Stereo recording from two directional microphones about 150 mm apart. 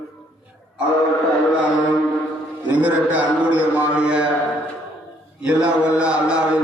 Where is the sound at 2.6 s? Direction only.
10° right (ahead or behind).